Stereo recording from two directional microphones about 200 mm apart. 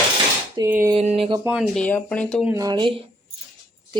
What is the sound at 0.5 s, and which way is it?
Cutlery, 15° right (ahead or behind).